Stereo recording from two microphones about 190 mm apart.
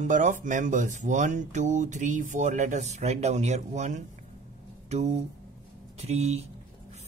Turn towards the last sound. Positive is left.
turn(degrees=-35)  # may be behind; listen again after turning